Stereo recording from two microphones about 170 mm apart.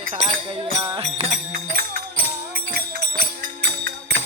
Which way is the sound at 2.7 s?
70° right (ahead or behind).